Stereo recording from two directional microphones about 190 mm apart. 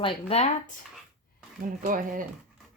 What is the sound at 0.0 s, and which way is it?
Speech, 35° left (ahead or behind).